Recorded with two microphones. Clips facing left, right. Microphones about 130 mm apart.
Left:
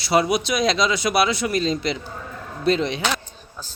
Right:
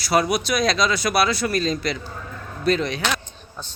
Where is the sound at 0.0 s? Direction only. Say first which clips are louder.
Left 1 dB; 25° left (ahead or behind).